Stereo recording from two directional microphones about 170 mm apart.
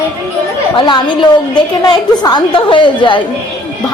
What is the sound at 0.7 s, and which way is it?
A woman's voice, 25° left (ahead or behind).